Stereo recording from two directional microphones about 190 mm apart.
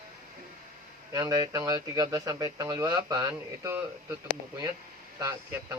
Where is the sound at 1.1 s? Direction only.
20° right (ahead or behind).